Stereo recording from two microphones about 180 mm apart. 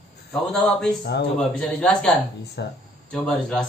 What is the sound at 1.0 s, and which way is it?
Speech, 65° left (ahead or behind).